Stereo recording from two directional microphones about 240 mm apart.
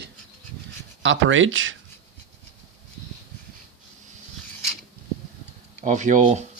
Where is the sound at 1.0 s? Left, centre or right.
Right.